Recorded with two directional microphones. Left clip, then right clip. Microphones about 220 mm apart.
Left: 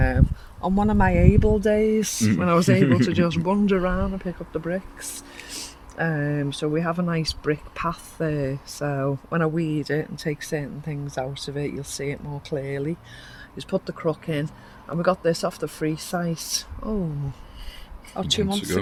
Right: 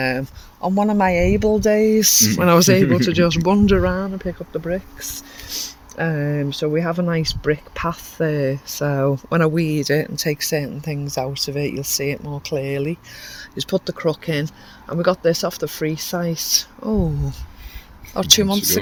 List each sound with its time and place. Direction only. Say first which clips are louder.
0.0 s speech: right 4 dB; 35° right (ahead or behind)
18.1 s speech: right 9 dB; 50° right (ahead or behind)